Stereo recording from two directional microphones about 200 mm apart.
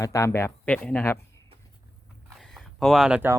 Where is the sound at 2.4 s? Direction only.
Centre (ahead or behind).